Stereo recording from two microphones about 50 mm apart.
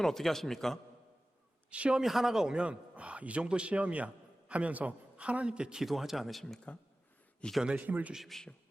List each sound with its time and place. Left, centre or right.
0.0 s a man's voice: centre
1.7 s a man's voice: right
2.0 s a man's voice: centre
5.8 s speech: centre
7.4 s a man's voice: centre
7.8 s a man's voice: right
8.3 s a man's voice: centre